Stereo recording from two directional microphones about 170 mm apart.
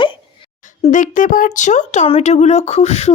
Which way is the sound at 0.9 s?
50° left (ahead or behind).